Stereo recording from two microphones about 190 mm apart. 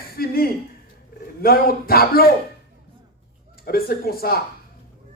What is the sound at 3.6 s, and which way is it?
Speech, 50° left (ahead or behind).